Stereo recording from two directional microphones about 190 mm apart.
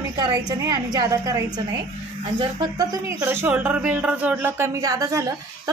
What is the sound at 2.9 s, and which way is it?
Speech, 15° right (ahead or behind).